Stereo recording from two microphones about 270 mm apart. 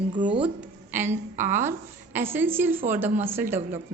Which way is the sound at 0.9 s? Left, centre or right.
Centre.